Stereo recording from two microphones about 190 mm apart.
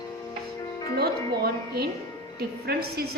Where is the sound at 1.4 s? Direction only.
55° right (ahead or behind).